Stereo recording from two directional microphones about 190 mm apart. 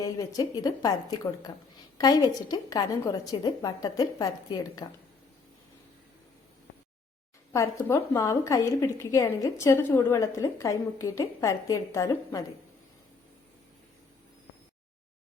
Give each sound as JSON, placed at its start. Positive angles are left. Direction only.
{"t": 0.0, "sound": "a woman's voice", "side_deg": 20}
{"t": 7.5, "sound": "a woman's voice", "side_deg": 15}